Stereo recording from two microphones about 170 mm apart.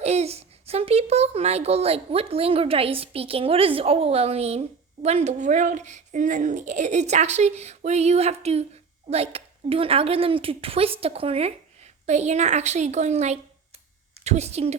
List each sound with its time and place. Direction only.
0.0 s a child's voice: 40° right (ahead or behind)